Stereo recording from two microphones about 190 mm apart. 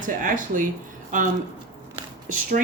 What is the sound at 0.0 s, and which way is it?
Speech, 45° right (ahead or behind).